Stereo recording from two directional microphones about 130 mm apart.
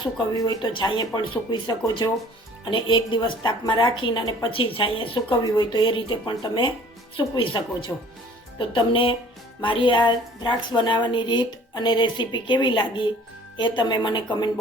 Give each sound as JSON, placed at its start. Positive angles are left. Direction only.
{"t": 0.0, "sound": "a woman's voice", "side_deg": 30}
{"t": 4.5, "sound": "a woman's voice", "side_deg": 45}